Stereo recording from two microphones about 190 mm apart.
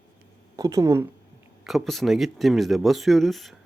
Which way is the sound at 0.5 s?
15° right (ahead or behind).